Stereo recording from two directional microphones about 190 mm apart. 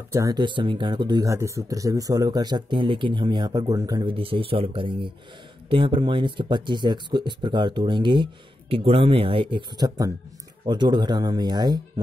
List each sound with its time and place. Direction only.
0.1 s speech: 20° right (ahead or behind)